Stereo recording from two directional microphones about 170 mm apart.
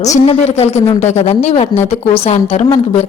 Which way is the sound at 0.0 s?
40° left (ahead or behind).